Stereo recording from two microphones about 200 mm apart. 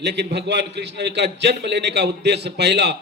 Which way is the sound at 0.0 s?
60° right (ahead or behind).